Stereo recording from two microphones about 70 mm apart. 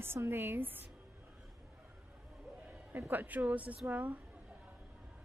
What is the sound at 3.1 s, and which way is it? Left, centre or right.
Speech, right.